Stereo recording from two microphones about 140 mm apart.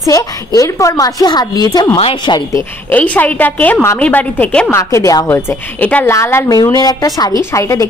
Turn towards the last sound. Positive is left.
turn(degrees=20)  # may be behind; listen again after turning